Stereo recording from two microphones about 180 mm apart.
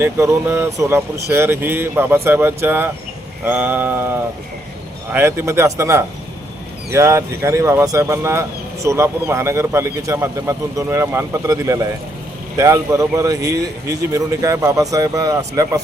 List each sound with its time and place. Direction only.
0.0 s speech: 15° right (ahead or behind)